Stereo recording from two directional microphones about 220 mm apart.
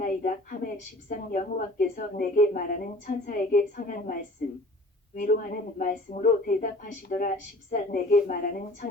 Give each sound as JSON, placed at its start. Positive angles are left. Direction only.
{"t": 0.0, "sound": "a woman's voice", "side_deg": 40}